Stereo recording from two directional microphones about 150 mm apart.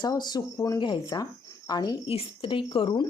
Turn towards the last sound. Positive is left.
turn(degrees=35)  # may be behind; listen again after turning